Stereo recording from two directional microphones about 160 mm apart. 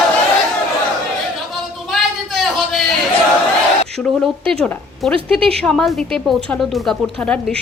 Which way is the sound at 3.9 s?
5° left (ahead or behind).